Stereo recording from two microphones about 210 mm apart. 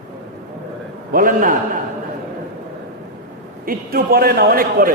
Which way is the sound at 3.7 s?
45° right (ahead or behind).